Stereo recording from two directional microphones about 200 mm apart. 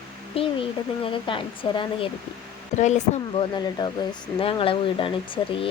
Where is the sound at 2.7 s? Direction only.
35° left (ahead or behind).